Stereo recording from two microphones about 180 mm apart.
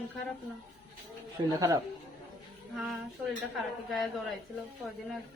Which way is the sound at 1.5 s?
20° right (ahead or behind).